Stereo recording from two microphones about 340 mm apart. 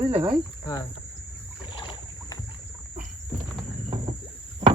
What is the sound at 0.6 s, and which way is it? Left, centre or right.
Speech, centre.